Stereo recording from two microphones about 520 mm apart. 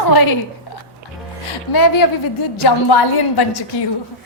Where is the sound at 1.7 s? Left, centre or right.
Left.